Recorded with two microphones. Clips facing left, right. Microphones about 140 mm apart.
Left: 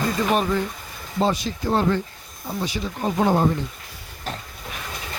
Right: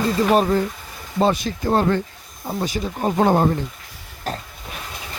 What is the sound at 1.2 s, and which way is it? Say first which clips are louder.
Speech: right 3 dB; 55° right (ahead or behind).